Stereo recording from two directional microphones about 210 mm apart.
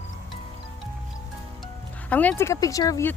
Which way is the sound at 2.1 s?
10° left (ahead or behind).